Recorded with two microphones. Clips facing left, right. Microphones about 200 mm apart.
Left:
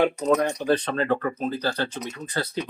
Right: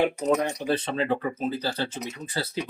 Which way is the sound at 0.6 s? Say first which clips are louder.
Left 3 dB; 5° right (ahead or behind).